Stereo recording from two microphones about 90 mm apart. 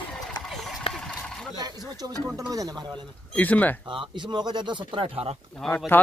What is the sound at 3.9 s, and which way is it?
Speech, 65° right (ahead or behind).